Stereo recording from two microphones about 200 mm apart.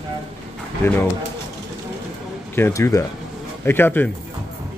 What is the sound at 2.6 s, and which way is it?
Speech, 15° left (ahead or behind).